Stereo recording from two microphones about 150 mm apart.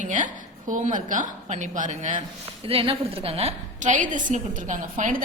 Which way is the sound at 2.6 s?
35° right (ahead or behind).